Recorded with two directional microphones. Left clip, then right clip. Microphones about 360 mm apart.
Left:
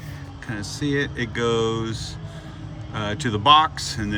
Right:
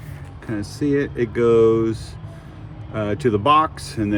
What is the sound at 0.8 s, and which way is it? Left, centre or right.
Speech, centre.